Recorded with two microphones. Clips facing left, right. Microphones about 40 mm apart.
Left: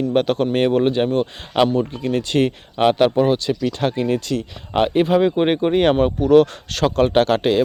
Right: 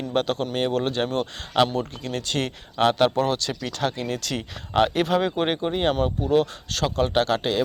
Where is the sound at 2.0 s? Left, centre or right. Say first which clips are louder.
Left 9 dB; left.